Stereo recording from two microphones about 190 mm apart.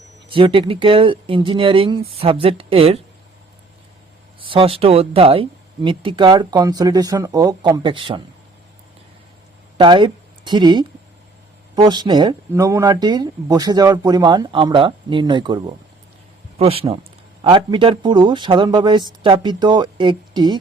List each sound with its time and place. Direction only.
0.3 s speech: 25° right (ahead or behind)
4.4 s speech: 30° right (ahead or behind)
9.7 s speech: 25° right (ahead or behind)